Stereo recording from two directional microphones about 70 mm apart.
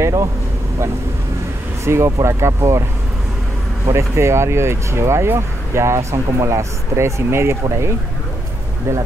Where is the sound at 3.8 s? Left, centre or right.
Right.